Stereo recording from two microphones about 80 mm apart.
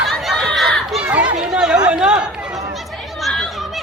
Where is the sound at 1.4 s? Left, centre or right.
Centre.